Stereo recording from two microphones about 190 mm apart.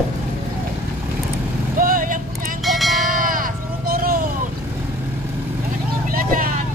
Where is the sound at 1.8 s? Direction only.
45° right (ahead or behind).